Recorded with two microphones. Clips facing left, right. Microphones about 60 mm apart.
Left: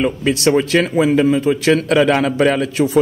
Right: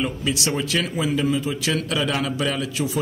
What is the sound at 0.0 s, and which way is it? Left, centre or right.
A man's voice, left.